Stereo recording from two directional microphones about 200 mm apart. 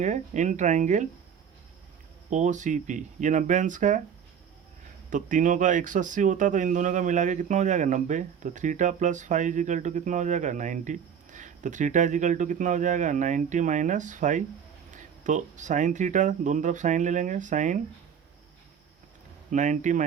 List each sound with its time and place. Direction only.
0.0 s speech: 35° right (ahead or behind)
2.3 s speech: 35° right (ahead or behind)
5.1 s speech: 40° right (ahead or behind)
19.5 s speech: 40° right (ahead or behind)